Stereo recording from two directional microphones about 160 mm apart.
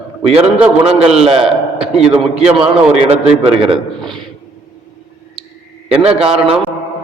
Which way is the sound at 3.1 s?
40° right (ahead or behind).